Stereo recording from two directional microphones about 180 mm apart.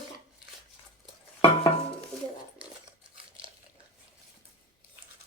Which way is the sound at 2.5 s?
5° right (ahead or behind).